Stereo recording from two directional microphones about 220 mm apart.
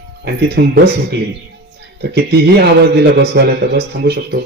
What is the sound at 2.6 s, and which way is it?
Speech, 50° right (ahead or behind).